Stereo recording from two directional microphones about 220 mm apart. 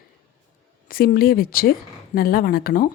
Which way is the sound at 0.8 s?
40° left (ahead or behind).